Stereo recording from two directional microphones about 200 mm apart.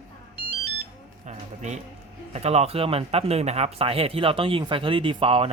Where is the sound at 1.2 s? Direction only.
35° right (ahead or behind).